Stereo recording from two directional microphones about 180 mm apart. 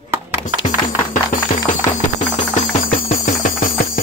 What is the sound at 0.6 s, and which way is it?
Music, 45° left (ahead or behind).